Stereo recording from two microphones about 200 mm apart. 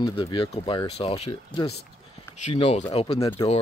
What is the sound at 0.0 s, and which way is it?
Speech, 25° left (ahead or behind).